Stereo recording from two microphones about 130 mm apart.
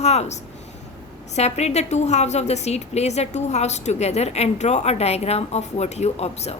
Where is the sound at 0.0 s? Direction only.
55° left (ahead or behind).